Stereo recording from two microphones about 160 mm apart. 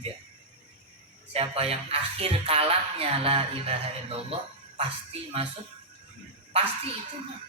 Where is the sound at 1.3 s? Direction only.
40° right (ahead or behind).